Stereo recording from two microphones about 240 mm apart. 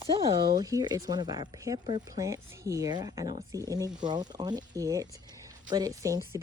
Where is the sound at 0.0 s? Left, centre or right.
Centre.